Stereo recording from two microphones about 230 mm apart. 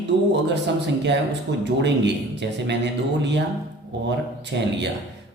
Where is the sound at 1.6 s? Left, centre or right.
Right.